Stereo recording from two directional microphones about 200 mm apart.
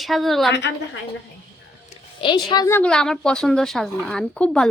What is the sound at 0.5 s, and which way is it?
Speech, 60° left (ahead or behind).